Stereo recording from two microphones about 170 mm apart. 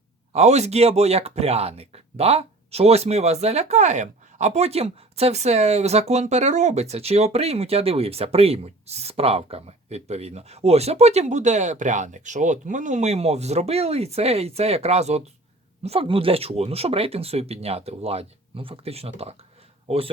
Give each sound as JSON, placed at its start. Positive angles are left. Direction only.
{"t": 0.3, "sound": "speech", "side_deg": -40}